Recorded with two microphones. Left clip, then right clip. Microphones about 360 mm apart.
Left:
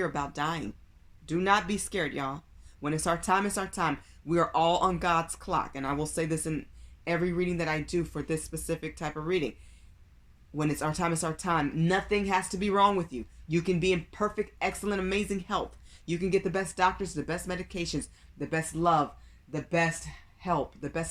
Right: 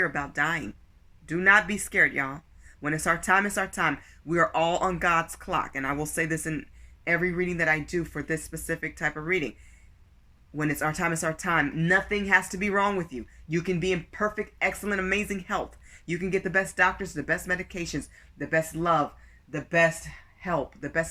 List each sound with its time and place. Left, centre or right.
0.0 s speech: centre
10.6 s speech: centre
20.4 s speech: centre